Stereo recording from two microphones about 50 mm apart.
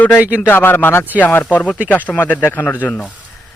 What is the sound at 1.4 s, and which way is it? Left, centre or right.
A man's voice, left.